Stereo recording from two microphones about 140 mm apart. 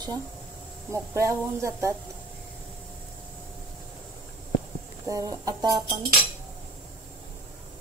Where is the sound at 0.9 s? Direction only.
20° right (ahead or behind).